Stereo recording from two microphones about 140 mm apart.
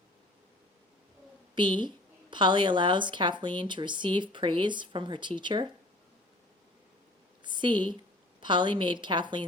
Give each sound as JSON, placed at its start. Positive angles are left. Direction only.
{"t": 1.5, "sound": "speech", "side_deg": -35}
{"t": 7.4, "sound": "a sound", "side_deg": -35}
{"t": 8.4, "sound": "speech", "side_deg": -35}